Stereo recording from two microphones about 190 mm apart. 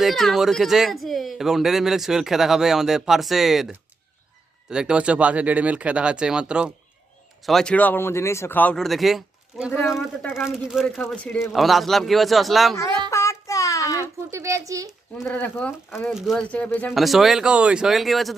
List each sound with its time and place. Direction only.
0.0 s speech: centre (ahead or behind)
13.1 s child singing: 15° left (ahead or behind)
14.3 s speech: 15° right (ahead or behind)
15.2 s speech: 10° left (ahead or behind)
16.0 s speech: centre (ahead or behind)